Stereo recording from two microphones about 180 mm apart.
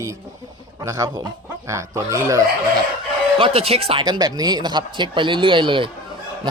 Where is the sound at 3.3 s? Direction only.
30° right (ahead or behind).